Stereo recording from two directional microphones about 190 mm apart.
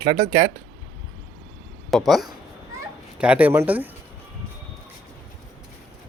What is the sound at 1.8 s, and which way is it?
Speech, centre (ahead or behind).